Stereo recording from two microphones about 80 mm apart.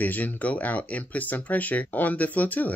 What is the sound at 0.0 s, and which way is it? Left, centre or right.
Speech, left.